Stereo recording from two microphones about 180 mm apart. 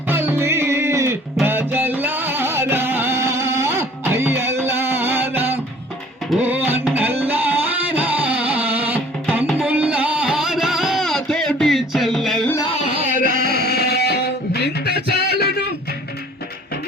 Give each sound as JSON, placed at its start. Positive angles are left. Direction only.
{"t": 0.1, "sound": "music", "side_deg": -10}
{"t": 13.0, "sound": "a sound", "side_deg": -45}
{"t": 13.4, "sound": "music", "side_deg": 60}